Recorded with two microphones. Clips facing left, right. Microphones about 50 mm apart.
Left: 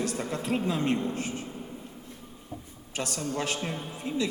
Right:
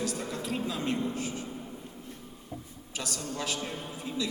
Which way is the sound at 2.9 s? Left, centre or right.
Left.